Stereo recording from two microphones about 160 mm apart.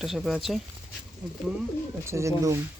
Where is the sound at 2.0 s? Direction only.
20° right (ahead or behind).